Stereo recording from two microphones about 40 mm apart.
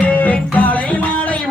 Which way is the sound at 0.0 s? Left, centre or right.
Left.